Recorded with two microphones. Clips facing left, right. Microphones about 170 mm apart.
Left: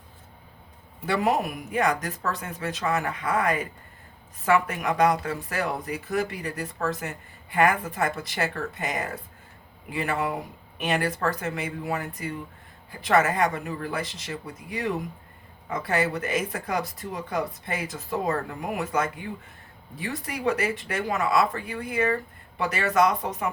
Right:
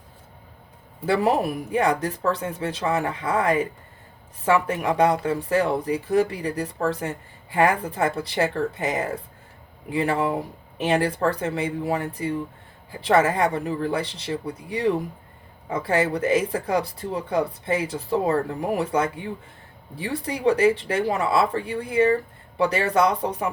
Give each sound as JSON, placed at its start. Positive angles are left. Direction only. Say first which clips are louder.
{"t": 1.0, "sound": "speech", "louder": "right 4 dB", "side_deg": -30}